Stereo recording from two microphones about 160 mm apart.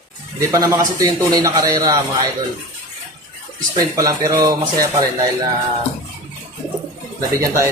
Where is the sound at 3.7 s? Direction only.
20° right (ahead or behind).